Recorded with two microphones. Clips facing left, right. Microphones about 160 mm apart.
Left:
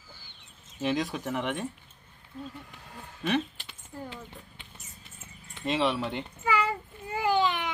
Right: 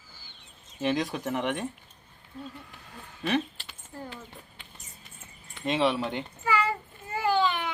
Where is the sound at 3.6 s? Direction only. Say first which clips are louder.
Even; 20° left (ahead or behind).